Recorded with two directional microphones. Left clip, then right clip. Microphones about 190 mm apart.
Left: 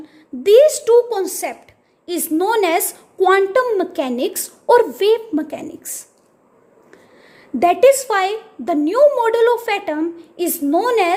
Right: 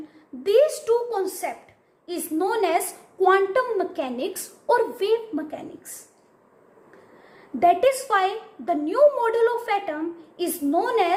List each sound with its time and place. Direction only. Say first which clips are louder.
0.4 s a woman's voice: left 8 dB; 45° left (ahead or behind)
7.6 s a woman's voice: left 6 dB; 45° left (ahead or behind)